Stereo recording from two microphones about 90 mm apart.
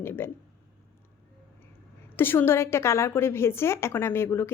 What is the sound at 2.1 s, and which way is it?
A woman's voice, 25° left (ahead or behind).